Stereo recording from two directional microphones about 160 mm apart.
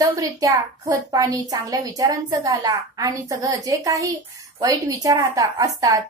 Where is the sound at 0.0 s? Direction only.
20° right (ahead or behind).